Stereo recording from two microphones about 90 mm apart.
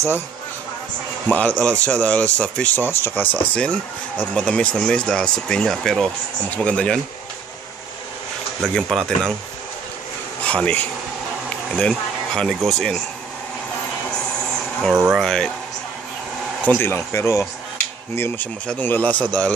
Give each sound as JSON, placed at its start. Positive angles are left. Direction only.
{"t": 1.3, "sound": "speech", "side_deg": 15}
{"t": 8.6, "sound": "speech", "side_deg": 5}
{"t": 10.4, "sound": "speech", "side_deg": 15}
{"t": 15.1, "sound": "speech", "side_deg": 5}
{"t": 16.6, "sound": "speech", "side_deg": 15}
{"t": 16.9, "sound": "speech", "side_deg": 30}